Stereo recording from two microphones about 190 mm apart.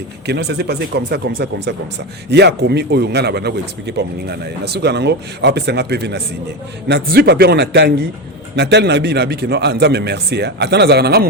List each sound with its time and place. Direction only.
0.3 s speech: 60° right (ahead or behind)